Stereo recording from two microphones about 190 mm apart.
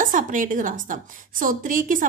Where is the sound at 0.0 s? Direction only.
45° right (ahead or behind).